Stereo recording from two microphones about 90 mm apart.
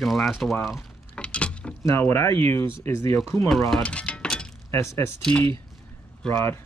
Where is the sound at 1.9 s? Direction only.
30° left (ahead or behind).